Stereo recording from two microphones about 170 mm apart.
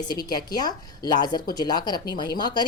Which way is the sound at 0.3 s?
25° left (ahead or behind).